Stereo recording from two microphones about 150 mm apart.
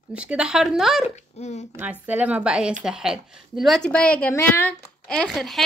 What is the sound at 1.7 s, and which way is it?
A woman's voice, 10° right (ahead or behind).